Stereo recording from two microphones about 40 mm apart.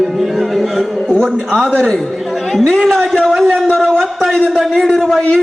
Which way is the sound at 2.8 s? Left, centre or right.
Centre.